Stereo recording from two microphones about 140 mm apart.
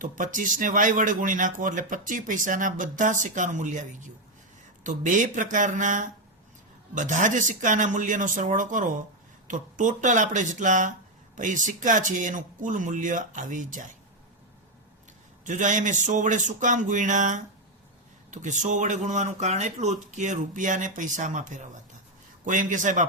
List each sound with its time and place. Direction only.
0.0 s speech: 70° right (ahead or behind)
15.4 s speech: 65° right (ahead or behind)